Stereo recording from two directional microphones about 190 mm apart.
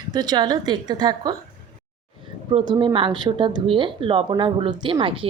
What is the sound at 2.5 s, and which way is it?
Speech, 25° right (ahead or behind).